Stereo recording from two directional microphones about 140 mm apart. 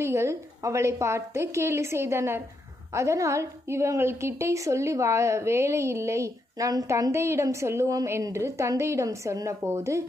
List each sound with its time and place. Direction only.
0.0 s a woman's voice: 20° right (ahead or behind)